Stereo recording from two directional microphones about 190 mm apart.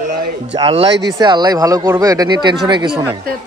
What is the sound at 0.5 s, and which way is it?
Speech, 30° right (ahead or behind).